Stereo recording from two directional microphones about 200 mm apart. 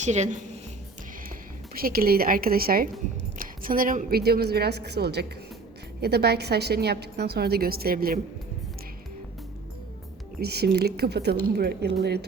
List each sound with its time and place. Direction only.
0.0 s a woman's voice: 35° right (ahead or behind)
1.7 s a woman's voice: 45° right (ahead or behind)
10.4 s a woman's voice: 55° right (ahead or behind)